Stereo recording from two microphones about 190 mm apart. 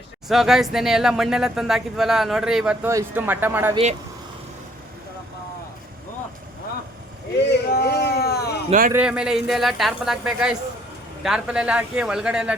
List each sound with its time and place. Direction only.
0.3 s speech: centre (ahead or behind)
7.3 s a sound: 65° left (ahead or behind)
8.9 s speech: 5° right (ahead or behind)